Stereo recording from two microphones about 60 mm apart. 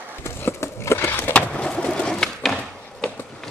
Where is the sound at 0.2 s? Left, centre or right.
Left.